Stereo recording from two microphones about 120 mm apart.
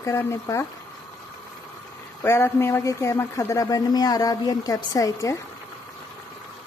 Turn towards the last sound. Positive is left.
turn(degrees=30)  # may be behind; listen again after turning